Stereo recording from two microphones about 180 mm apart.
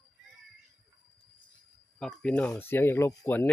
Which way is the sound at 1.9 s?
5° left (ahead or behind).